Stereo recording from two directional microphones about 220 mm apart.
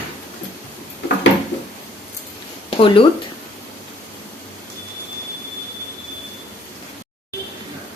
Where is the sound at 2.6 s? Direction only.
25° left (ahead or behind).